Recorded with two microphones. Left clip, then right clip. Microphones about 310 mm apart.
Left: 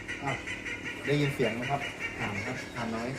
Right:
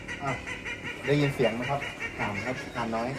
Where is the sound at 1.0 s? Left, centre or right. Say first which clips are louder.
Right 4 dB; centre.